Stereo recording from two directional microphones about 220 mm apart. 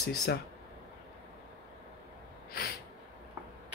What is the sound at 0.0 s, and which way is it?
Speech, 50° left (ahead or behind).